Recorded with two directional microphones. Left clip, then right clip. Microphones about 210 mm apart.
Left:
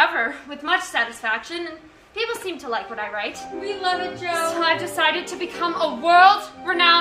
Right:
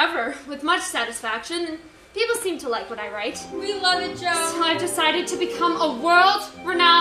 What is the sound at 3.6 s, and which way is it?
Music, 40° right (ahead or behind).